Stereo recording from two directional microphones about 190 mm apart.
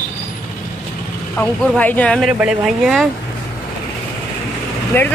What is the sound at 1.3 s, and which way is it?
Speech, 10° left (ahead or behind).